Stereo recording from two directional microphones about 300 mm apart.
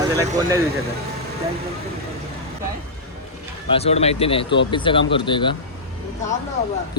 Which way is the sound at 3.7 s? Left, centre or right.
Centre.